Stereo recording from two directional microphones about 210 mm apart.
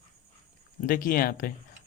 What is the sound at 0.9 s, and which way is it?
Speech, 40° left (ahead or behind).